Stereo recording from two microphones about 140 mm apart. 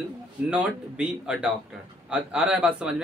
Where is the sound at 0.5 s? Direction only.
5° right (ahead or behind).